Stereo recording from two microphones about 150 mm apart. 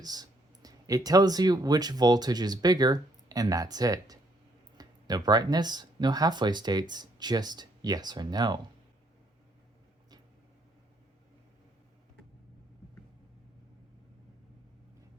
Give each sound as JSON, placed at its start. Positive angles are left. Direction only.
{"t": 0.0, "sound": "speech", "side_deg": -25}